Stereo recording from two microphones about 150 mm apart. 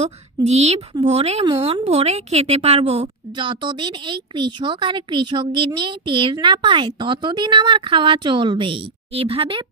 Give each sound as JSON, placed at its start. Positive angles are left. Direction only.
{"t": 0.0, "sound": "a woman's voice", "side_deg": -45}